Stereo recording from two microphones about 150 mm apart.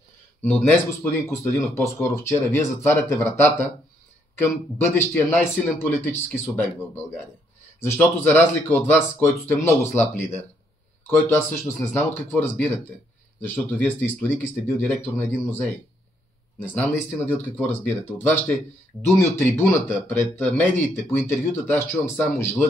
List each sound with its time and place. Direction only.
0.4 s speech: 10° left (ahead or behind)
7.8 s speech: 10° left (ahead or behind)
16.7 s speech: 10° left (ahead or behind)